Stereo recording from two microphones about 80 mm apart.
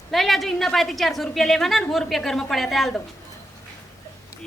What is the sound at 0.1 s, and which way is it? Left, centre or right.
A woman's voice, centre.